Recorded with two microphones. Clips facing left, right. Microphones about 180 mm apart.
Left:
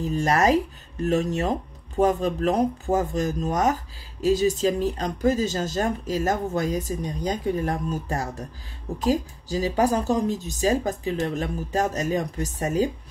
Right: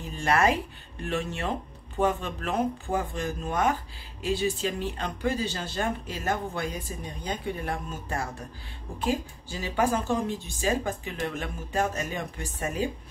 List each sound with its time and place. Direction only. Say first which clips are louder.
0.0 s speech: left 3 dB; 40° left (ahead or behind)